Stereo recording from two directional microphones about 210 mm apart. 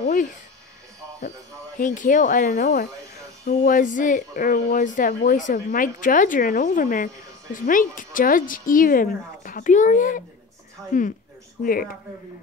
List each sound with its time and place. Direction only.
0.0 s speech: 40° left (ahead or behind)
1.8 s speech: 40° left (ahead or behind)